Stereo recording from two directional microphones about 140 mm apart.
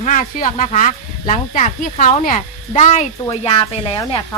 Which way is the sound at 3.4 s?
40° left (ahead or behind).